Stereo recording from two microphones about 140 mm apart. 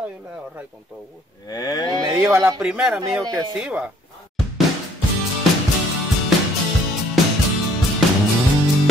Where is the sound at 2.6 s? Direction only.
5° right (ahead or behind).